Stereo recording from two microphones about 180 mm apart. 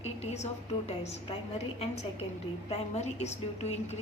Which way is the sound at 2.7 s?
35° left (ahead or behind).